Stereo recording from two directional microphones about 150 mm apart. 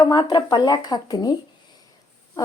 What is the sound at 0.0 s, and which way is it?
A woman's voice, 30° left (ahead or behind).